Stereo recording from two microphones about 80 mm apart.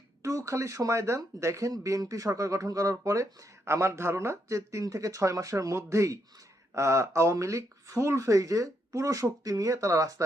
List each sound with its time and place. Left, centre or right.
0.2 s speech: right